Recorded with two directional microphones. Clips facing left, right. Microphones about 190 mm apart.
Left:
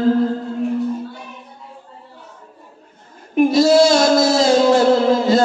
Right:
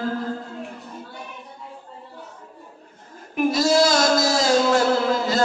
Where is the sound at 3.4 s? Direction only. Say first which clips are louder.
Left 7 dB; 25° left (ahead or behind).